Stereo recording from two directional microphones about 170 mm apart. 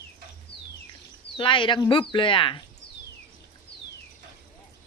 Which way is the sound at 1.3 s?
30° left (ahead or behind).